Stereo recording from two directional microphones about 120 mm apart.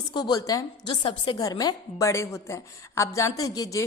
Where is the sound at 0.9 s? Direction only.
45° left (ahead or behind).